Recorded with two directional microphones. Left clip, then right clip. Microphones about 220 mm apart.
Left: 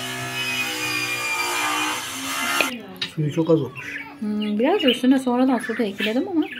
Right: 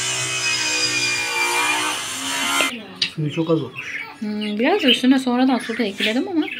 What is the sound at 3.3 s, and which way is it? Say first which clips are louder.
Speech: left 3 dB; 25° left (ahead or behind).